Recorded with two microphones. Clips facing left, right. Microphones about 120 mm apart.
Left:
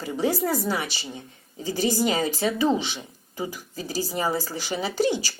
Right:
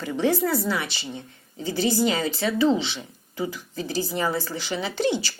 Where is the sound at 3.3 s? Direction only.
40° left (ahead or behind).